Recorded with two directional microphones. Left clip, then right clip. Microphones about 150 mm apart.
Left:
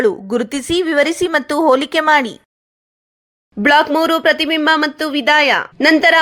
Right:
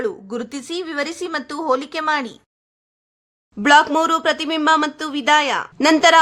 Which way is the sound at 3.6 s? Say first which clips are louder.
Left 1 dB; 15° left (ahead or behind).